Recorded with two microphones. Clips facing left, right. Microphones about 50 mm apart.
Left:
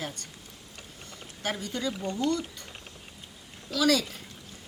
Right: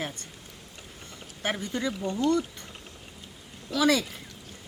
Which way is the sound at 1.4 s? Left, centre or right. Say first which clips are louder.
Right 2 dB; right.